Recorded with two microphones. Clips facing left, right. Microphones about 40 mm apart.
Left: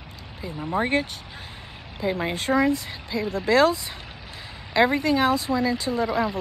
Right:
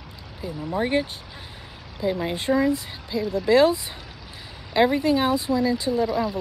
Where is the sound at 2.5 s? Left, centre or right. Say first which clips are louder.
Even; centre.